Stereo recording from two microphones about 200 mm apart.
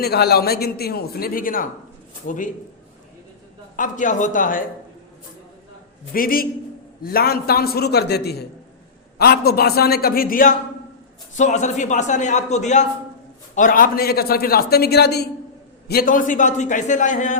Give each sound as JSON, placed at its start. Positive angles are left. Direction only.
{"t": 0.0, "sound": "a man's voice", "side_deg": 55}
{"t": 3.8, "sound": "a man's voice", "side_deg": 40}
{"t": 6.1, "sound": "a man's voice", "side_deg": 45}